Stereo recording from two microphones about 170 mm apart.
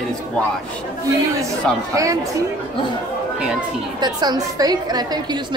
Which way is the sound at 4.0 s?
25° right (ahead or behind).